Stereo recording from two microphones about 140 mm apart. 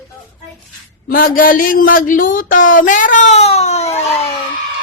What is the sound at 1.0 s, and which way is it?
Speech, 90° left.